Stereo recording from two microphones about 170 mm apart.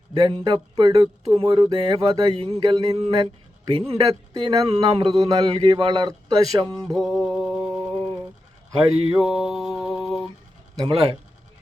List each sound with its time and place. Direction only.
0.1 s speech: 30° right (ahead or behind)
6.9 s mantra: centre (ahead or behind)
7.9 s a sound: 5° left (ahead or behind)
9.1 s mantra: 5° right (ahead or behind)
10.8 s speech: 30° right (ahead or behind)